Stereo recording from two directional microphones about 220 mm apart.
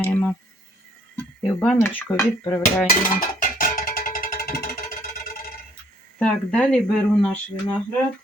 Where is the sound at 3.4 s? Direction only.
40° left (ahead or behind).